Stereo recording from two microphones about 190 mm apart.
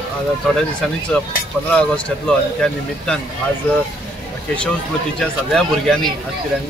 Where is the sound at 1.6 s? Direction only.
5° left (ahead or behind).